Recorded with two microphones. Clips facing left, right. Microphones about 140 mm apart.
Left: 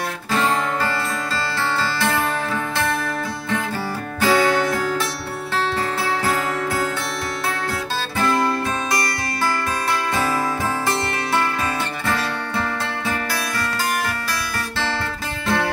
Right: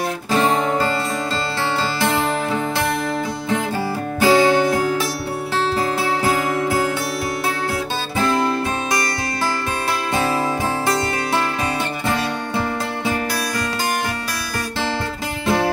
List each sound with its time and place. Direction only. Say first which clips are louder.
0.3 s music: right 3 dB; 15° right (ahead or behind)
2.0 s music: right 2 dB; 20° right (ahead or behind)
4.2 s music: right 3 dB; 20° right (ahead or behind)
6.2 s music: right 3 dB; 20° right (ahead or behind)
12.1 s music: right 1 dB; 20° right (ahead or behind)